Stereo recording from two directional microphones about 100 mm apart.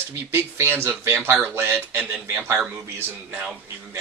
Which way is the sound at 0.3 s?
20° right (ahead or behind).